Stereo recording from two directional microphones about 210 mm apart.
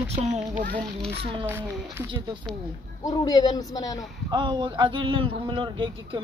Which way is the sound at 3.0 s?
15° left (ahead or behind).